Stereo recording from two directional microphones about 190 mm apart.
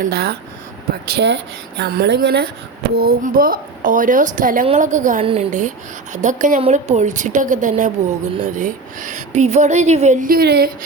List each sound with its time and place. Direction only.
0.0 s a woman's voice: 55° right (ahead or behind)
5.2 s a woman's voice: 30° right (ahead or behind)
5.5 s a woman's voice: 40° right (ahead or behind)